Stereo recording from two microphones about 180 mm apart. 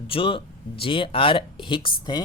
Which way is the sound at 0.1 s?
30° left (ahead or behind).